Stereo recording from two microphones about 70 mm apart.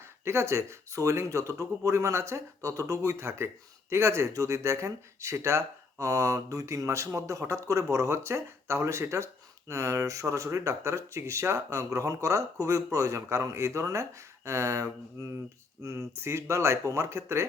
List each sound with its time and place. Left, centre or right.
0.3 s speech: right